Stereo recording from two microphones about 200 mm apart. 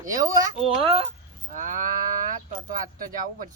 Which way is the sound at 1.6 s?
40° right (ahead or behind).